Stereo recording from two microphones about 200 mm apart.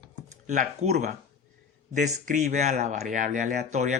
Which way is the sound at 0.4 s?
35° right (ahead or behind).